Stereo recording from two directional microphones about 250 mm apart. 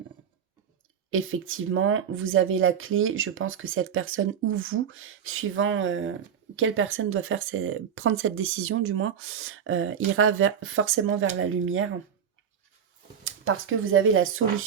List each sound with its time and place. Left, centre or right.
1.1 s speech: right
13.2 s speech: right